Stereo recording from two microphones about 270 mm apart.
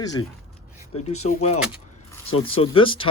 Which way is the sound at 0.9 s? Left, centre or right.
Left.